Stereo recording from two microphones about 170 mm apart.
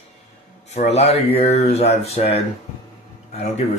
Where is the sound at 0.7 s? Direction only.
40° left (ahead or behind).